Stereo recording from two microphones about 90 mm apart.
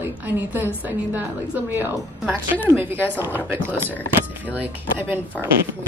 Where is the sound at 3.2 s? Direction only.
20° right (ahead or behind).